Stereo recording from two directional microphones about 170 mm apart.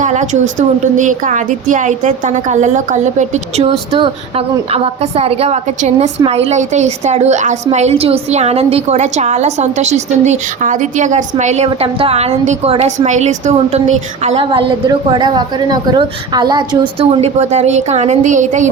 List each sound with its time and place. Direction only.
0.0 s a sound: 45° right (ahead or behind)
0.9 s a woman's voice: 45° right (ahead or behind)
14.5 s speech: 25° right (ahead or behind); by 18.7 s 45° right (ahead or behind)